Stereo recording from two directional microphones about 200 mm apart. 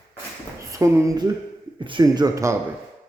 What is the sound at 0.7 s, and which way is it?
A woman's voice, 15° right (ahead or behind).